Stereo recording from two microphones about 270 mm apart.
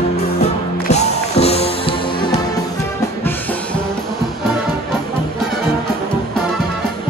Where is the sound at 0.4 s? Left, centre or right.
Left.